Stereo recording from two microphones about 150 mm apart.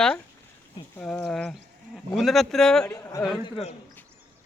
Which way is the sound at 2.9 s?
20° left (ahead or behind).